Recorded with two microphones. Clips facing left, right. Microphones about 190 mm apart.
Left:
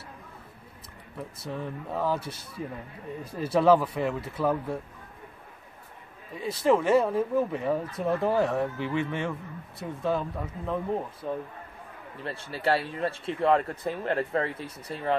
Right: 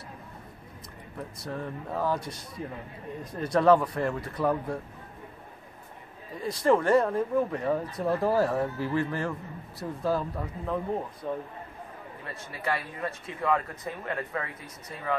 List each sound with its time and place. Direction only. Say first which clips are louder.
1.1 s speech: even; centre (ahead or behind)
6.3 s speech: even; 5° left (ahead or behind)
12.2 s speech: left 7 dB; 30° left (ahead or behind)